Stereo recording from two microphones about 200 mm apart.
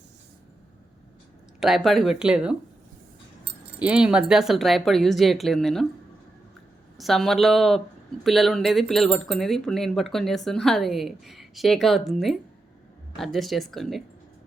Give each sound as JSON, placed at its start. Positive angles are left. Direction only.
{"t": 1.6, "sound": "speech", "side_deg": 0}
{"t": 3.8, "sound": "speech", "side_deg": -5}
{"t": 6.9, "sound": "speech", "side_deg": 0}